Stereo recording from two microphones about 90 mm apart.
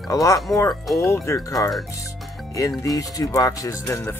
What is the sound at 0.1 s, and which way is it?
Speech, 40° left (ahead or behind).